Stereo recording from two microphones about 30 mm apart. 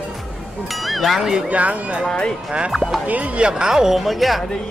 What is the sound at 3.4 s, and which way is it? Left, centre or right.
Speech, right.